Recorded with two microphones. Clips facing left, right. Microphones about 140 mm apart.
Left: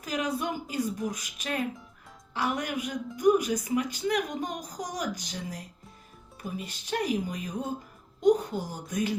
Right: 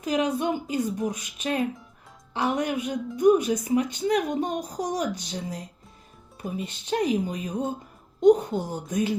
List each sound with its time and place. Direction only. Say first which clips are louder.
0.1 s speech: right 6 dB; 30° right (ahead or behind)